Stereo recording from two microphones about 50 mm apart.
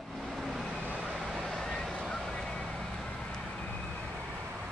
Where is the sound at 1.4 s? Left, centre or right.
Centre.